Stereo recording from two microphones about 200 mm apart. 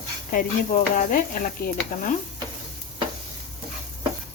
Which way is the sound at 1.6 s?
45° left (ahead or behind).